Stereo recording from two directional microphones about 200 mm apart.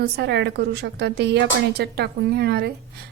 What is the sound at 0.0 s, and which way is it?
A woman's voice, 60° right (ahead or behind).